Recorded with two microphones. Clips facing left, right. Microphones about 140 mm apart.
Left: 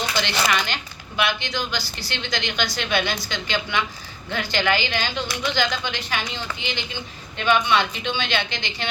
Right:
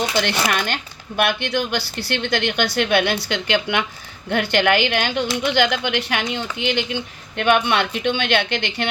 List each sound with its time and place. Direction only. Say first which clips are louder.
0.2 s speech: left 1 dB; 55° right (ahead or behind)